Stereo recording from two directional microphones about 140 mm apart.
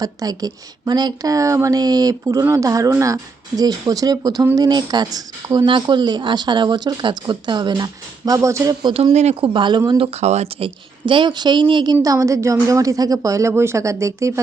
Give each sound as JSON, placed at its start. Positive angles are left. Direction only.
{"t": 0.0, "sound": "speech", "side_deg": -25}
{"t": 8.9, "sound": "speech", "side_deg": -40}
{"t": 10.1, "sound": "speech", "side_deg": -50}
{"t": 11.9, "sound": "speech", "side_deg": -25}